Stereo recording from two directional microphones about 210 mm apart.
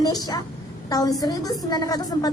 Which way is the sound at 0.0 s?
20° left (ahead or behind).